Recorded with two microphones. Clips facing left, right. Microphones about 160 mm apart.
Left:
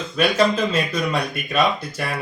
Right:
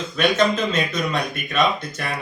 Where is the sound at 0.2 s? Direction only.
10° left (ahead or behind).